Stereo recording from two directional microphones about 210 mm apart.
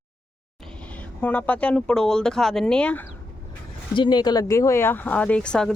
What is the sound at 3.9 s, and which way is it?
Speech, 20° left (ahead or behind).